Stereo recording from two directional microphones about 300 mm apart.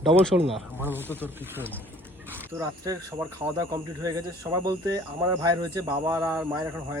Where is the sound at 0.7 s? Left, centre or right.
Centre.